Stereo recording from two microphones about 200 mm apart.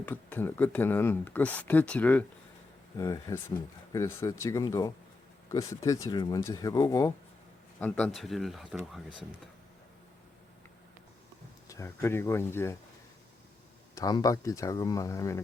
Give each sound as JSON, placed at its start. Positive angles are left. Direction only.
{"t": 0.0, "sound": "speech", "side_deg": 10}
{"t": 11.7, "sound": "speech", "side_deg": 15}
{"t": 13.9, "sound": "speech", "side_deg": 20}